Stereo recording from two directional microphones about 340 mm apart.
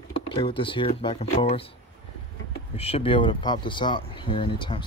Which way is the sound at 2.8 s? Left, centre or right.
Centre.